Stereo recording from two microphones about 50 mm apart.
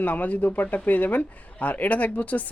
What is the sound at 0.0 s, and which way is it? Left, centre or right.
Speech, left.